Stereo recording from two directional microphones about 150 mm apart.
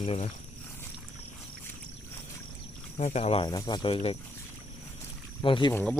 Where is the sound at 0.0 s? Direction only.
50° left (ahead or behind).